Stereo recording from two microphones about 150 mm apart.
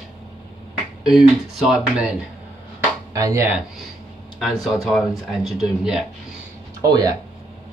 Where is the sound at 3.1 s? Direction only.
20° right (ahead or behind).